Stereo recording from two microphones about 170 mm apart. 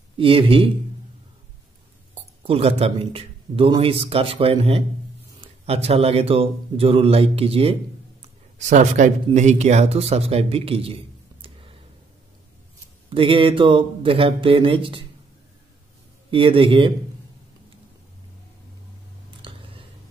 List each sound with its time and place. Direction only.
0.2 s speech: 30° right (ahead or behind)
2.1 s speech: 35° right (ahead or behind)
11.4 s a sound: 30° right (ahead or behind)
13.1 s speech: 30° right (ahead or behind)
16.3 s speech: 30° right (ahead or behind)
19.4 s scissors: 30° right (ahead or behind)